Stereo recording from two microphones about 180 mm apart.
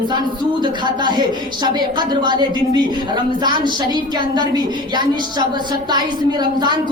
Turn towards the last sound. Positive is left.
turn(degrees=-25)  # may be behind; listen again after turning